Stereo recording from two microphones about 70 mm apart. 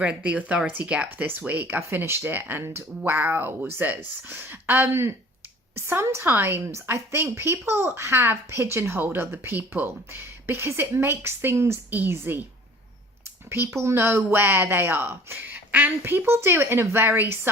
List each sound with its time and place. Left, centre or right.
0.0 s speech: centre
1.8 s a woman's voice: right
11.9 s a woman's voice: right
13.5 s a woman's voice: right